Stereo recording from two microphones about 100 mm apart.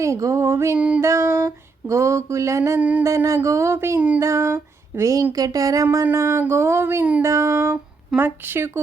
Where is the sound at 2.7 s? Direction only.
15° right (ahead or behind).